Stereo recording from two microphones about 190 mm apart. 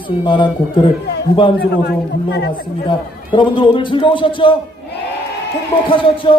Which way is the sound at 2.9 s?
25° left (ahead or behind).